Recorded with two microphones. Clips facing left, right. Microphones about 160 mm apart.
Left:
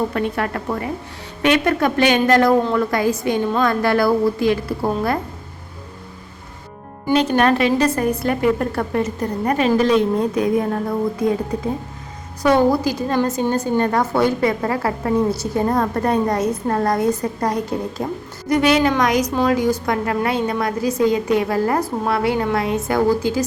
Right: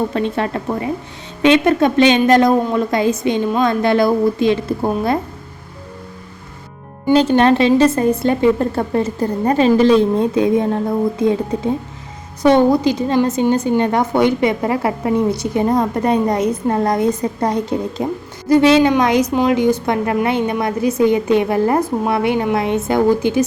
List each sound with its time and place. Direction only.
0.1 s a woman's voice: 25° right (ahead or behind)
7.1 s a woman's voice: 30° right (ahead or behind)